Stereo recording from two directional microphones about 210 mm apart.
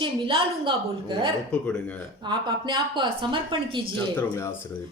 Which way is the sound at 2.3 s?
20° right (ahead or behind).